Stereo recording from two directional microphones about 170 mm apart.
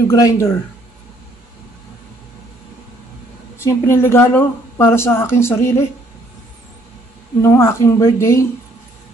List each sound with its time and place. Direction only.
0.1 s speech: 20° left (ahead or behind)
3.6 s a woman's voice: 15° left (ahead or behind)
7.4 s a woman's voice: 15° left (ahead or behind)